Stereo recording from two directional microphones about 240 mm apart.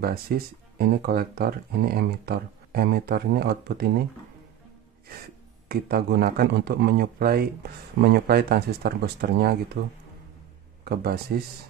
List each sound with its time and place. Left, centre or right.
0.0 s speech: right
5.7 s speech: right
10.9 s speech: right